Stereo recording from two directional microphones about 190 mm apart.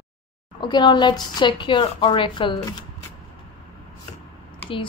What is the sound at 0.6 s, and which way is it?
Speech, 25° left (ahead or behind).